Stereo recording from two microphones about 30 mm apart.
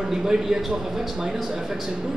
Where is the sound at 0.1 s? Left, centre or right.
Centre.